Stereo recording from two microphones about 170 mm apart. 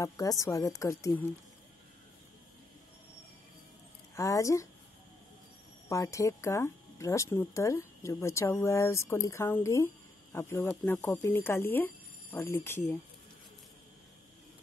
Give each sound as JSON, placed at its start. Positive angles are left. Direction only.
{"t": 0.0, "sound": "a woman's voice", "side_deg": 20}
{"t": 4.1, "sound": "speech", "side_deg": 20}
{"t": 5.9, "sound": "speech", "side_deg": 20}